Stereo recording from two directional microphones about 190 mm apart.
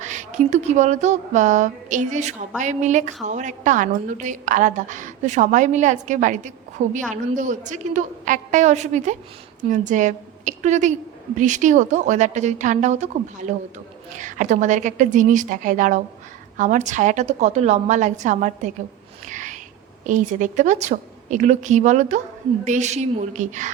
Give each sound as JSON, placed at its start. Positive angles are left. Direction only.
{"t": 0.0, "sound": "a woman's voice", "side_deg": -40}
{"t": 19.2, "sound": "a sound", "side_deg": -40}
{"t": 20.1, "sound": "a woman's voice", "side_deg": -40}